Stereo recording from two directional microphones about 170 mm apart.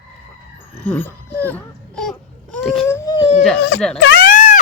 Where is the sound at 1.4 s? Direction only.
5° left (ahead or behind).